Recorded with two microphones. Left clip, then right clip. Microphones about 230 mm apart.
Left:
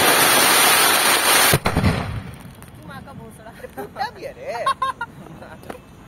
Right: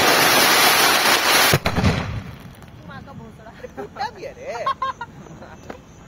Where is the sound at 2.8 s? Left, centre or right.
Left.